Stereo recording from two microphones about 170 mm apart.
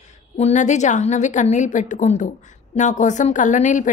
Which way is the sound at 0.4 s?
45° left (ahead or behind).